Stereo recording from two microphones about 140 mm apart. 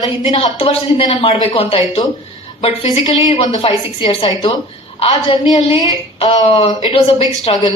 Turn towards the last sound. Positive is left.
turn(degrees=40)  # may be behind; listen again after turning